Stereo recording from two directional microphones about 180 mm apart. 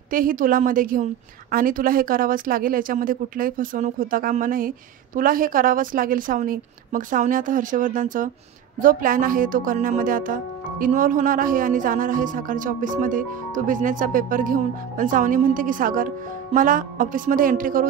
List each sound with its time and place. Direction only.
0.1 s speech: 50° right (ahead or behind)